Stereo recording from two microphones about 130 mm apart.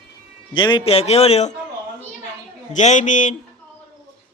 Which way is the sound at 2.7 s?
65° left (ahead or behind).